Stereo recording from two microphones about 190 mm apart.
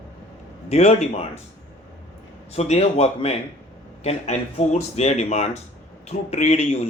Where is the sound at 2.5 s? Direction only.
35° left (ahead or behind).